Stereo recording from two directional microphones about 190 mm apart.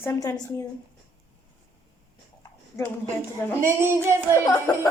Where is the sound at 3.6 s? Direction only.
15° right (ahead or behind).